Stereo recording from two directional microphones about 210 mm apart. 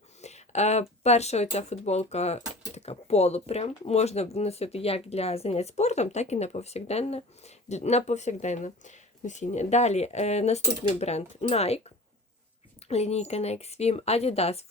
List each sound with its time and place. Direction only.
0.2 s speech: 30° left (ahead or behind)